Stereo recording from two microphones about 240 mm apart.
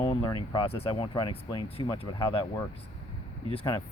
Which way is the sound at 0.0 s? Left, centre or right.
Left.